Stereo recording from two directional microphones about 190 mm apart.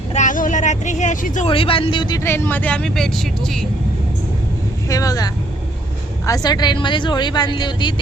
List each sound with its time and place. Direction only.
0.1 s vehicle: 40° left (ahead or behind)
1.5 s speech: 30° left (ahead or behind); by 3.7 s centre (ahead or behind)
4.9 s speech: 20° left (ahead or behind)